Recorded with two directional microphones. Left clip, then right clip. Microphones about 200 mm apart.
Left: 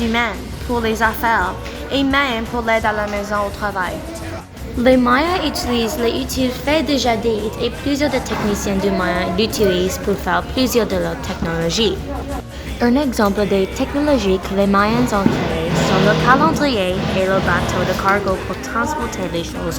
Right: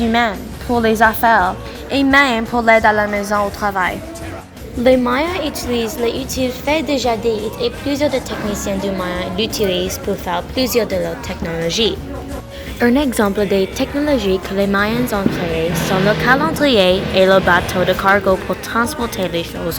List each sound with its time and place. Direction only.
0.1 s a woman's voice: 35° right (ahead or behind)
4.8 s a woman's voice: centre (ahead or behind)
12.8 s speech: 15° right (ahead or behind)
13.2 s a woman's voice: 5° right (ahead or behind)
16.2 s speech: 10° right (ahead or behind)
16.7 s speech: 30° right (ahead or behind)